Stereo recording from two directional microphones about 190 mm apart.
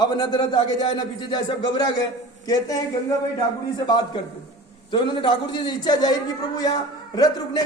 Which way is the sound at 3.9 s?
20° left (ahead or behind).